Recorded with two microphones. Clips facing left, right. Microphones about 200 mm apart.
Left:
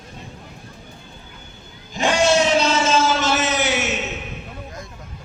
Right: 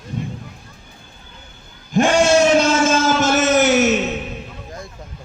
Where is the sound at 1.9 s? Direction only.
50° right (ahead or behind).